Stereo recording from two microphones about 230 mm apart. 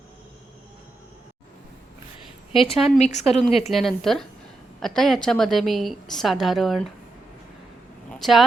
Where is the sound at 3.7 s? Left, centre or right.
Centre.